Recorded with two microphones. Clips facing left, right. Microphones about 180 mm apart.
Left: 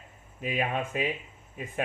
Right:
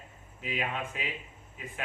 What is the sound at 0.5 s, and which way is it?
Speech, 50° left (ahead or behind).